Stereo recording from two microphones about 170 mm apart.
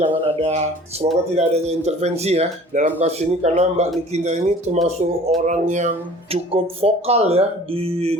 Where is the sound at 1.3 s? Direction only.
40° right (ahead or behind).